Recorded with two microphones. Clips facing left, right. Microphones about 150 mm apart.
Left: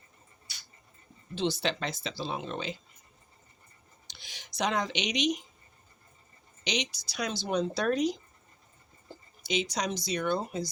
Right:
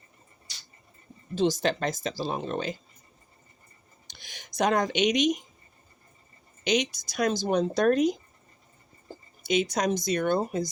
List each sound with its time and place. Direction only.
1.4 s speech: 45° right (ahead or behind)
4.1 s speech: 50° right (ahead or behind)
6.7 s speech: 50° right (ahead or behind)
9.4 s speech: 50° right (ahead or behind)